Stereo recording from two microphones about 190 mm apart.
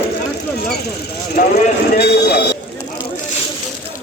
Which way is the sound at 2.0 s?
60° left (ahead or behind).